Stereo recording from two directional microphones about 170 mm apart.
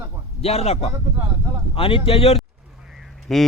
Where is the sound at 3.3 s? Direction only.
Centre (ahead or behind).